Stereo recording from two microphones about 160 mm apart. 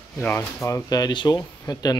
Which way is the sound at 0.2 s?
15° left (ahead or behind).